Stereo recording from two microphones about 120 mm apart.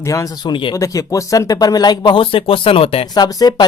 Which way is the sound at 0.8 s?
30° left (ahead or behind).